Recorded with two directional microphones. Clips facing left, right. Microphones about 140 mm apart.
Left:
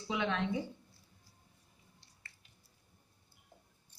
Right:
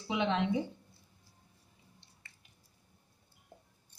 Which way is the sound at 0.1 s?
20° right (ahead or behind).